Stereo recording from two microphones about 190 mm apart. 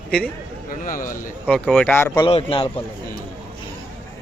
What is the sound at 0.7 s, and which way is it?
Speech, 45° left (ahead or behind).